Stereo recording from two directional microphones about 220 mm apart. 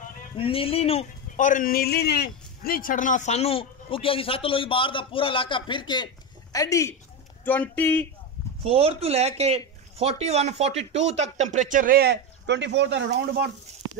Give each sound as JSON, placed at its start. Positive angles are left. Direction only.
{"t": 0.4, "sound": "speech", "side_deg": 25}
{"t": 8.6, "sound": "speech", "side_deg": -25}